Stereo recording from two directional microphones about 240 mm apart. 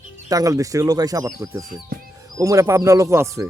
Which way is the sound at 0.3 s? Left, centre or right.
Centre.